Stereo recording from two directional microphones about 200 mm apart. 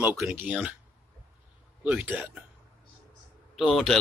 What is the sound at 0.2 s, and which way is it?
Speech, 5° right (ahead or behind).